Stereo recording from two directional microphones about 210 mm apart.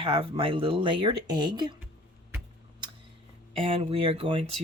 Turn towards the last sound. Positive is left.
turn(degrees=-25)  # may be behind; listen again after turning